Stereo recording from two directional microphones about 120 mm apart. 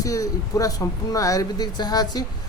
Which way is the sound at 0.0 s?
25° left (ahead or behind).